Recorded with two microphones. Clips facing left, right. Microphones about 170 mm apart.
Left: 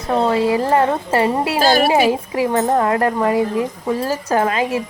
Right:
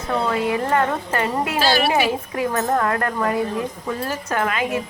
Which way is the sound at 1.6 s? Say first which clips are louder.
Left 5 dB; 45° left (ahead or behind).